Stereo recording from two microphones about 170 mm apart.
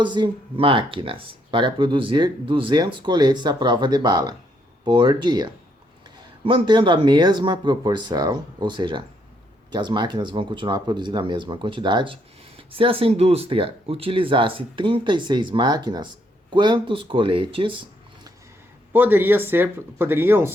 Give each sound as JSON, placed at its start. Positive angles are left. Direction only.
{"t": 0.0, "sound": "speech", "side_deg": -25}
{"t": 18.9, "sound": "speech", "side_deg": -10}